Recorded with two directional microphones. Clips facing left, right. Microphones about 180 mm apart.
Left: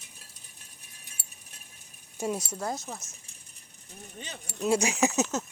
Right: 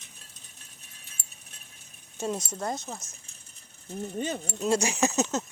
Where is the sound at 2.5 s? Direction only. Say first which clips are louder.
Right 1 dB; centre (ahead or behind).